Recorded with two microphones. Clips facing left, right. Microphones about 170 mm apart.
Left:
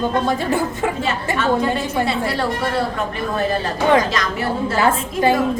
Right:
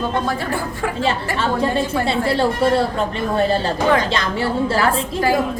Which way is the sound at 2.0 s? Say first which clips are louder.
Right 3 dB; 30° right (ahead or behind).